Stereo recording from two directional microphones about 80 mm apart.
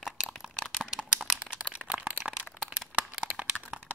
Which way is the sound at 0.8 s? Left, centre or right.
Centre.